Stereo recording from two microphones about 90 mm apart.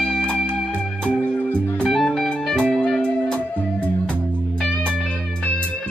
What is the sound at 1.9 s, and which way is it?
Music, 5° left (ahead or behind).